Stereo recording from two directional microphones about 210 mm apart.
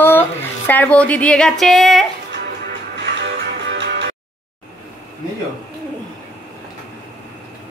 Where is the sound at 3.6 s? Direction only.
55° right (ahead or behind).